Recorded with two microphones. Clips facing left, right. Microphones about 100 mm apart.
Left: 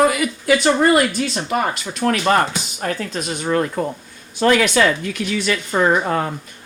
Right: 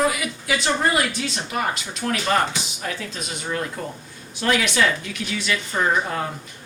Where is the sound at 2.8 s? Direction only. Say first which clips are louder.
Left 10 dB; 50° left (ahead or behind).